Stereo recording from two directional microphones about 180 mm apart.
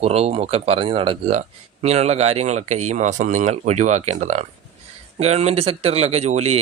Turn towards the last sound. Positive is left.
turn(degrees=-35)  # may be behind; listen again after turning